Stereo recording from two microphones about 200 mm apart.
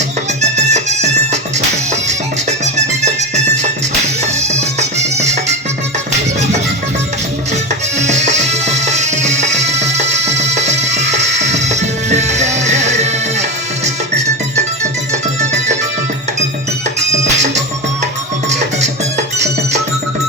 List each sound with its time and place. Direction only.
0.5 s music: 35° right (ahead or behind)
2.7 s music: 35° right (ahead or behind)
4.9 s music: 35° right (ahead or behind)
7.9 s music: 35° right (ahead or behind)
15.4 s music: 35° right (ahead or behind)